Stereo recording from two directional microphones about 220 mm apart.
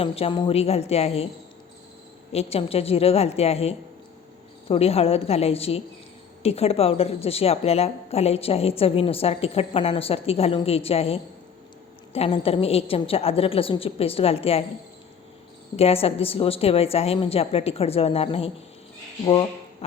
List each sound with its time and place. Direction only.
0.0 s a woman's voice: 25° left (ahead or behind)
2.3 s a woman's voice: 25° left (ahead or behind)
15.7 s a woman's voice: 25° left (ahead or behind)